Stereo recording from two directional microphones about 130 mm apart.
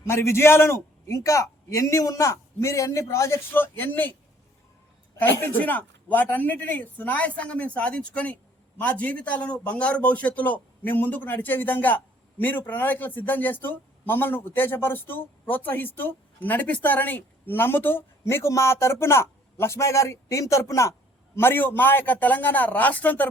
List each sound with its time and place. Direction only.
0.1 s a man's voice: 20° left (ahead or behind)
5.3 s speech: 15° left (ahead or behind)